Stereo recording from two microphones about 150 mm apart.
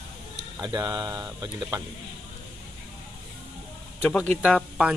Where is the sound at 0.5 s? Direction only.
25° right (ahead or behind).